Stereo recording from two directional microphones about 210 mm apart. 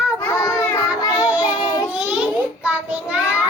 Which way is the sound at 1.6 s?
20° left (ahead or behind).